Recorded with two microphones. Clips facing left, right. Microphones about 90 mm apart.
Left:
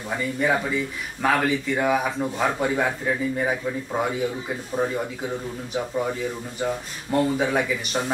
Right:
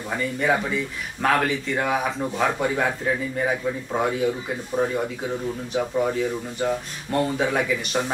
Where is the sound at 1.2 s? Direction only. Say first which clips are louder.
Even; 5° left (ahead or behind).